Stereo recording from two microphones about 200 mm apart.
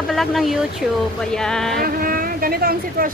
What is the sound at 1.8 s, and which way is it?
Speech, 45° right (ahead or behind).